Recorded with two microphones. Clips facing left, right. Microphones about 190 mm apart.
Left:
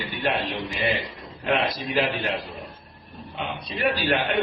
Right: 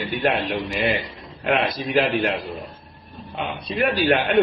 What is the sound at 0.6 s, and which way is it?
Speech, 55° right (ahead or behind).